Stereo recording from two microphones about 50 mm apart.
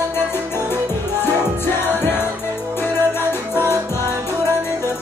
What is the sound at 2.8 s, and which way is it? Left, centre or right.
Music, left.